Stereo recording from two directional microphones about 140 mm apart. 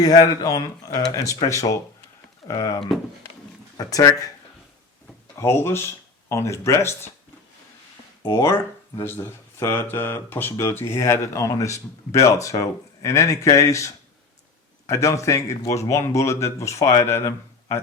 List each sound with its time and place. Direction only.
0.0 s speech: 25° left (ahead or behind)
5.4 s speech: 20° left (ahead or behind)
8.3 s speech: 20° left (ahead or behind)